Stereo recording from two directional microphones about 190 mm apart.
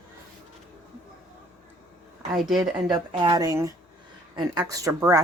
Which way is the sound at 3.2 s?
20° right (ahead or behind).